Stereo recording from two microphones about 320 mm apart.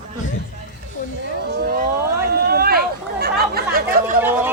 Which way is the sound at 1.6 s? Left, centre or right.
Right.